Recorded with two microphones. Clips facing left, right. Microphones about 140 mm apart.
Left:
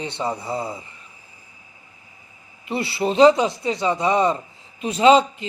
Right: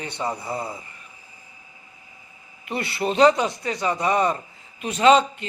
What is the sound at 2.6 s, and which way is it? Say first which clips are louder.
A man's voice: left 3 dB; 25° left (ahead or behind).